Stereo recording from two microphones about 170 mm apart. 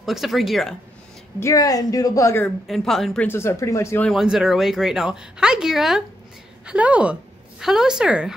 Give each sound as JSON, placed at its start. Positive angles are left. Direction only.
{"t": 0.0, "sound": "speech", "side_deg": 0}
{"t": 1.4, "sound": "speech", "side_deg": 20}
{"t": 2.7, "sound": "speech", "side_deg": 0}
{"t": 4.1, "sound": "a woman's voice", "side_deg": 0}